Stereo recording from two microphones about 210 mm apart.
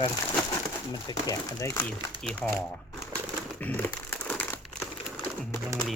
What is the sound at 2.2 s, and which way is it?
Speech, 5° left (ahead or behind).